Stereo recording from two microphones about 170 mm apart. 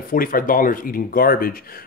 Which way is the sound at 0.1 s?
55° left (ahead or behind).